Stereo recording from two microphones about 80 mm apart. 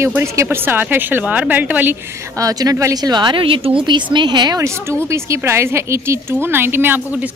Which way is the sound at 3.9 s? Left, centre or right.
Right.